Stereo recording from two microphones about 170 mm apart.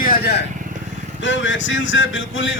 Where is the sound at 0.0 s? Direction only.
70° left (ahead or behind).